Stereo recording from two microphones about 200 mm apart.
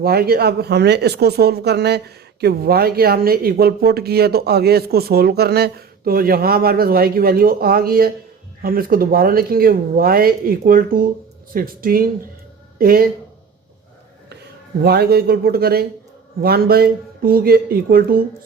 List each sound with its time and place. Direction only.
0.0 s speech: 50° right (ahead or behind)
14.8 s speech: 50° right (ahead or behind)